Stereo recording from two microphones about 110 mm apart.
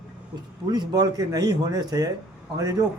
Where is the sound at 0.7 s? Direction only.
40° right (ahead or behind).